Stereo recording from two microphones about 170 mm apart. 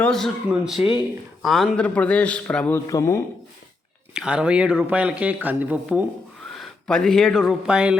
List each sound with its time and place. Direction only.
0.0 s speech: centre (ahead or behind)
0.8 s speech: 30° left (ahead or behind)
1.4 s a man's voice: centre (ahead or behind); by 3.2 s 15° left (ahead or behind)
4.1 s speech: 5° right (ahead or behind)